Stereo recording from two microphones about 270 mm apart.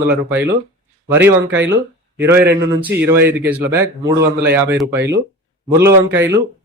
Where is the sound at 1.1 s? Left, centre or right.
Centre.